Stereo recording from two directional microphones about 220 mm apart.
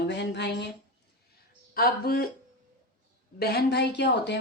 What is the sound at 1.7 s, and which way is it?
Speech, 45° left (ahead or behind).